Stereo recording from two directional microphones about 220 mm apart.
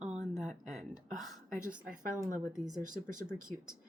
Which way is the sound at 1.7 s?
35° right (ahead or behind).